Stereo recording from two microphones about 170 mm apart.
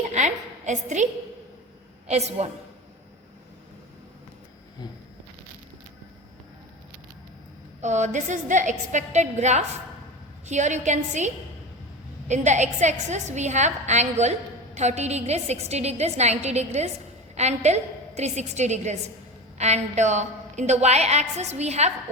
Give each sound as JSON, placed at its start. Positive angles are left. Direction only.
{"t": 0.1, "sound": "a sound", "side_deg": -45}
{"t": 2.0, "sound": "a woman's voice", "side_deg": -40}
{"t": 7.8, "sound": "a woman's voice", "side_deg": -45}
{"t": 12.3, "sound": "a woman's voice", "side_deg": -45}